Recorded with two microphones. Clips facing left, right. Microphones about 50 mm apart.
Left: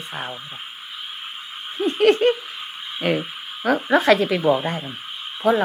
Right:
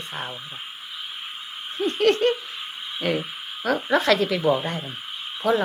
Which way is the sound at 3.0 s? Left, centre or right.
Centre.